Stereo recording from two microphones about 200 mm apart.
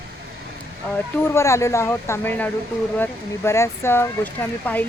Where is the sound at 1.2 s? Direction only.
15° left (ahead or behind).